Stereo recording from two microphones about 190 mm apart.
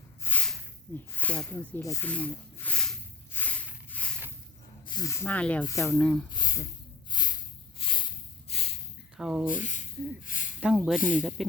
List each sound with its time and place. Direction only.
0.2 s snake: 10° left (ahead or behind)
1.1 s speech: 5° left (ahead or behind)
3.3 s a sound: 10° left (ahead or behind)
4.9 s speech: 20° left (ahead or behind)
6.3 s a sound: 20° left (ahead or behind)
9.1 s speech: 5° right (ahead or behind)
9.5 s speech: 40° left (ahead or behind)
10.2 s a sound: 45° left (ahead or behind)
10.6 s speech: 5° right (ahead or behind)